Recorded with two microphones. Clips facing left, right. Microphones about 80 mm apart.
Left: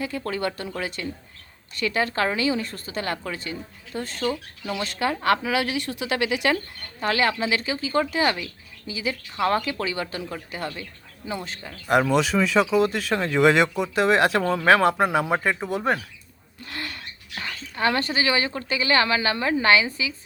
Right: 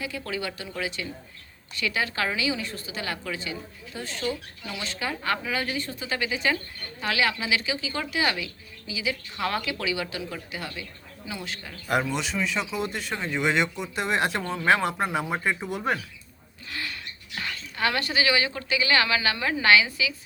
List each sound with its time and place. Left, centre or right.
0.0 s a woman's voice: left
7.0 s a woman's voice: left
11.9 s a woman's voice: left
13.7 s a woman's voice: left
14.0 s speech: left
16.6 s a sound: left
17.4 s speech: left